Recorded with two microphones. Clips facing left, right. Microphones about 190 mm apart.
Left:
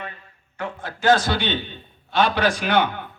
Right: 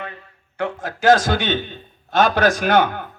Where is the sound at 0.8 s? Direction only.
45° right (ahead or behind).